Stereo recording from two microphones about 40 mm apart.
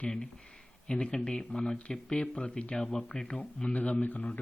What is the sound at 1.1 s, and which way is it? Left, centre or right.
Speech, centre.